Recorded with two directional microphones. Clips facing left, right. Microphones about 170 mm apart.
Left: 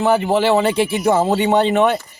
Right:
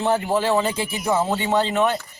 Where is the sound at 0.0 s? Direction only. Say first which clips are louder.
Left 5 dB; 80° left.